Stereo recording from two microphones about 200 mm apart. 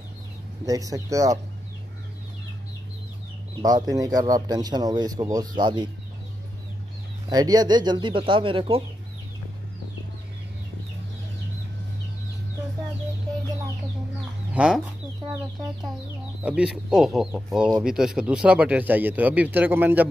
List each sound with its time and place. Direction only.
0.7 s speech: 15° right (ahead or behind)
3.6 s speech: 20° right (ahead or behind)
7.2 s speech: 20° right (ahead or behind)
14.5 s chicken: 5° right (ahead or behind)
16.4 s speech: 5° right (ahead or behind)